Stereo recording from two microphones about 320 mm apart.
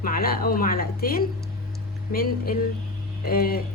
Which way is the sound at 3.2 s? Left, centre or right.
Left.